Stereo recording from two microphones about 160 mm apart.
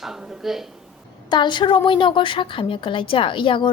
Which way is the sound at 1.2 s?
30° left (ahead or behind).